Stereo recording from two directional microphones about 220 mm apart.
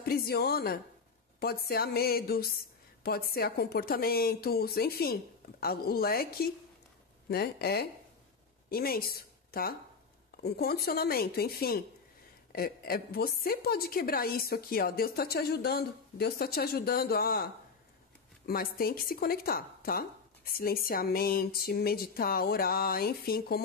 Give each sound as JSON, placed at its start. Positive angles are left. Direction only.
{"t": 0.0, "sound": "a woman's voice", "side_deg": 45}